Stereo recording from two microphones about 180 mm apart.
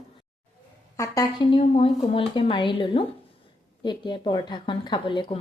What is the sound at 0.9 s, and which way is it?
Speech, 20° left (ahead or behind).